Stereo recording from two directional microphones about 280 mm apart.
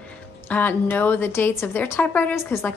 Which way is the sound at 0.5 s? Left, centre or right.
Centre.